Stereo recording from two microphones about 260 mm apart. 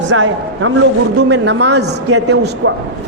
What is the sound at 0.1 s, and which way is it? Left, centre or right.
A man's voice, right.